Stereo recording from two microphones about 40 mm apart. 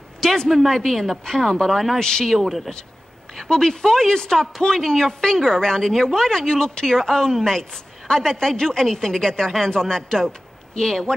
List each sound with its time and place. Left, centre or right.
0.2 s speech: centre
2.0 s a man's voice: centre
2.3 s speech: centre
3.3 s speech: centre